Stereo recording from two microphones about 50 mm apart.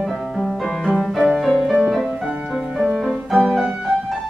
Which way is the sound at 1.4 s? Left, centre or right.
Centre.